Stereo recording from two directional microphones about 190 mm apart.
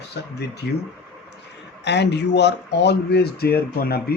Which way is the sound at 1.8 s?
65° left (ahead or behind).